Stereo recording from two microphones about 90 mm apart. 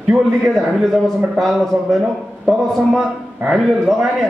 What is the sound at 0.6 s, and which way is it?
A man's voice, centre (ahead or behind).